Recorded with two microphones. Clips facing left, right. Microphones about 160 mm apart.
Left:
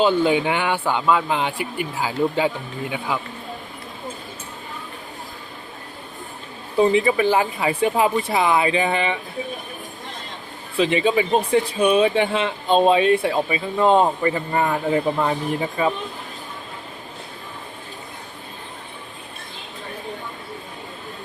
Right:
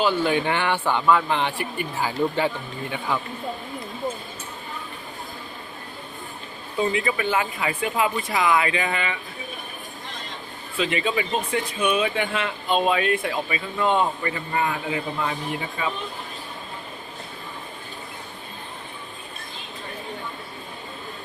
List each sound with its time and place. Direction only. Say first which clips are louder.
0.0 s speech: left 4 dB; 15° left (ahead or behind)
6.7 s speech: left 7 dB; 30° left (ahead or behind)
10.8 s speech: left 6 dB; 30° left (ahead or behind)